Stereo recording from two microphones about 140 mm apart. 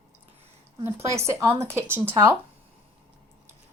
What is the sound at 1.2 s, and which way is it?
Speech, 20° right (ahead or behind).